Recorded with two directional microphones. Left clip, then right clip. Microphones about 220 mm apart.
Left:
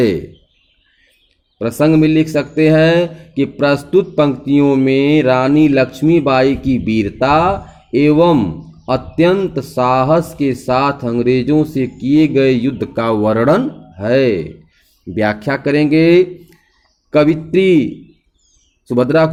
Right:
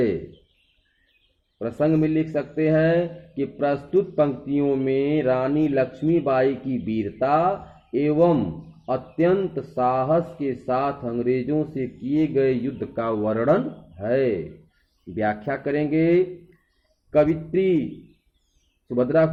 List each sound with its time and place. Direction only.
1.5 s speech: 45° left (ahead or behind)
17.5 s speech: 45° left (ahead or behind)
18.9 s speech: 40° left (ahead or behind)